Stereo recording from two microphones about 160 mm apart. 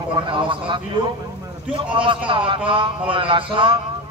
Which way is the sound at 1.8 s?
30° right (ahead or behind).